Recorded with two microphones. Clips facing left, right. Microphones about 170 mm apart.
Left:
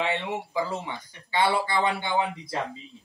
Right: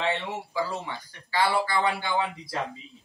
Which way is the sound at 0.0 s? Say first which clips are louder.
Left 1 dB; 20° left (ahead or behind).